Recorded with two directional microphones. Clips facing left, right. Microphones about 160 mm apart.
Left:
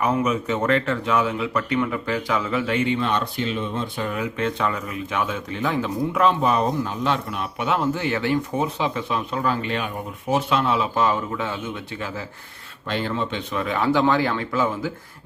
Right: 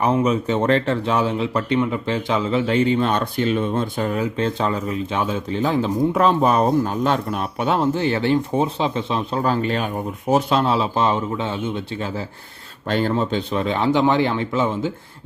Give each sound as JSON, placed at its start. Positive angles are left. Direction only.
{"t": 0.0, "sound": "speech", "side_deg": -30}
{"t": 12.9, "sound": "speech", "side_deg": -45}